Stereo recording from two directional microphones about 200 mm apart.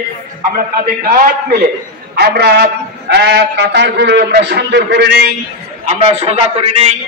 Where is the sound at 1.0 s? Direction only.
50° right (ahead or behind).